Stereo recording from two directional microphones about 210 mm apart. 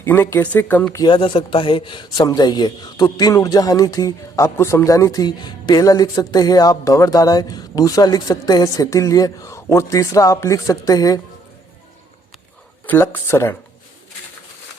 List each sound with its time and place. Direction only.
0.0 s a man's voice: 10° left (ahead or behind)
1.0 s a man's voice: 25° left (ahead or behind)
12.8 s a man's voice: 10° left (ahead or behind)